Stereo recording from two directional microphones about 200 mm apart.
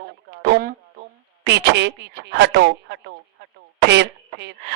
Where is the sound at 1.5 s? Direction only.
60° right (ahead or behind).